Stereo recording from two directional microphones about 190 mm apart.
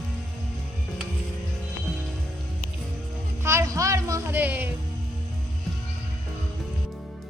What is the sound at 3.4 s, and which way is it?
Speech, 15° right (ahead or behind).